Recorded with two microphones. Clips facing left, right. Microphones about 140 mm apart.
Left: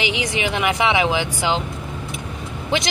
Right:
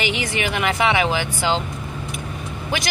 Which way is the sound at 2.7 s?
25° left (ahead or behind).